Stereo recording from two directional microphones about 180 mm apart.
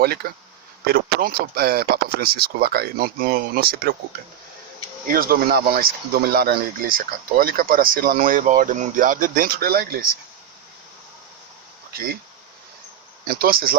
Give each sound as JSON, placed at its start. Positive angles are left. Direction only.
{"t": 0.0, "sound": "speech", "side_deg": -60}
{"t": 5.0, "sound": "speech", "side_deg": -55}
{"t": 13.2, "sound": "speech", "side_deg": -55}